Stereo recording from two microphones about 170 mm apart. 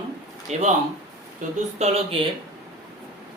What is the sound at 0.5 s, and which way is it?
Speech, 40° right (ahead or behind).